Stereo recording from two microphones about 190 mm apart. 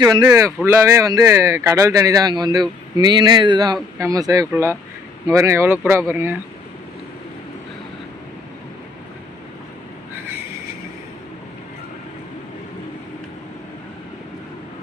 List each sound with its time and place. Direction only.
0.0 s speech: 20° right (ahead or behind)